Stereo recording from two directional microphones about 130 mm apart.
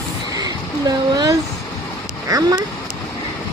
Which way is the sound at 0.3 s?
30° right (ahead or behind).